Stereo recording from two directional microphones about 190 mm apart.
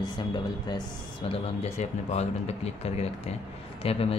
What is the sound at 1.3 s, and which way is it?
Speech, 35° left (ahead or behind).